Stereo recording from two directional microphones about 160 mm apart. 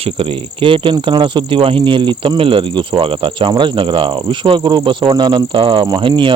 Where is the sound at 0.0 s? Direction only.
35° right (ahead or behind).